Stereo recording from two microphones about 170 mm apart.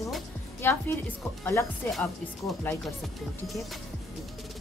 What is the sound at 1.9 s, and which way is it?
Speech, centre (ahead or behind).